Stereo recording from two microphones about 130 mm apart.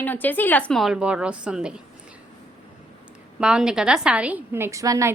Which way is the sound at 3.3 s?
5° right (ahead or behind).